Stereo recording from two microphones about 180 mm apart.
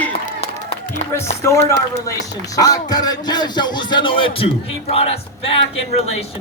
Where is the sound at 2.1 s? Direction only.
20° left (ahead or behind).